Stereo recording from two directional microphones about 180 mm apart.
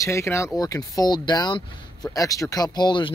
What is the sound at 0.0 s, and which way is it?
Speech, 15° left (ahead or behind).